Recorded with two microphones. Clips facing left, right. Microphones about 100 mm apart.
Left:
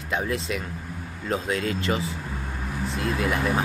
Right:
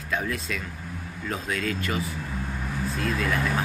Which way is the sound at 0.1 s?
25° left (ahead or behind).